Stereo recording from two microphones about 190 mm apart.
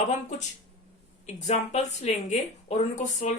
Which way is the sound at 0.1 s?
40° left (ahead or behind).